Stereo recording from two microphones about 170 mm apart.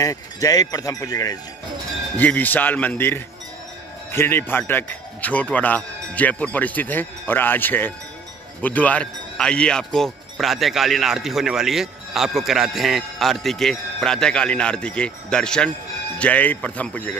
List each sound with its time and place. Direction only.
0.0 s speech: 20° left (ahead or behind)
2.1 s a man's voice: 10° left (ahead or behind)